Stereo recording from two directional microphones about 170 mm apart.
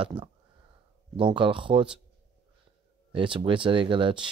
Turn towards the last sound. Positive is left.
turn(degrees=-30)  # may be behind; listen again after turning